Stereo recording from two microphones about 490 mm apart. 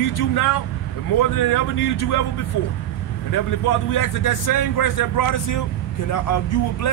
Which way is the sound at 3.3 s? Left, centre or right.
Left.